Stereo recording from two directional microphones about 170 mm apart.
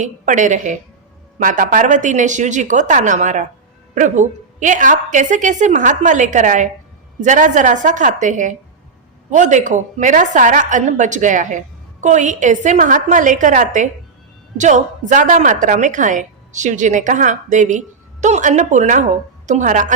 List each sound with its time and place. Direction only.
0.0 s a woman's voice: 45° right (ahead or behind)